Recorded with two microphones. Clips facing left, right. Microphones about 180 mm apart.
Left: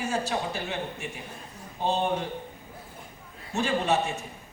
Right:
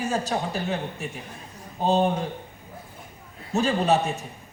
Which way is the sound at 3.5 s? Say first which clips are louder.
Right 4 dB; 35° right (ahead or behind).